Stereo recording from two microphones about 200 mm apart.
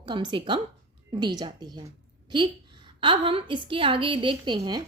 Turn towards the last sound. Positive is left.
turn(degrees=-20)  # may be behind; listen again after turning